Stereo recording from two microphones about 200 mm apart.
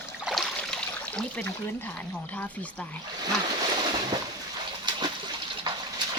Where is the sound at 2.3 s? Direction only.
5° left (ahead or behind).